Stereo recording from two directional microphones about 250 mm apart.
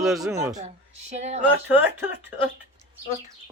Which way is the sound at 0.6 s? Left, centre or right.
Right.